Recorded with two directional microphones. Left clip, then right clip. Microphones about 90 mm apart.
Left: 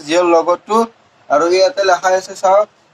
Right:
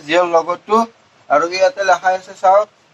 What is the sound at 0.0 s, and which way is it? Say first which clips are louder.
Speech: left 2 dB; 30° left (ahead or behind).